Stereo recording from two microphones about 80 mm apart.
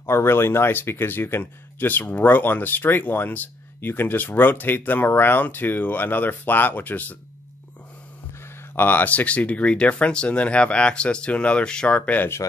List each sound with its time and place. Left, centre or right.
0.0 s speech: left
8.7 s speech: left